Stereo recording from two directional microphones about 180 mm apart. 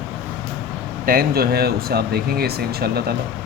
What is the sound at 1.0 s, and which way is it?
Speech, 55° right (ahead or behind).